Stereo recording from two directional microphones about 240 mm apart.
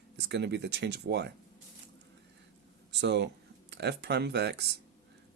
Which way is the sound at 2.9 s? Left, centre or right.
Right.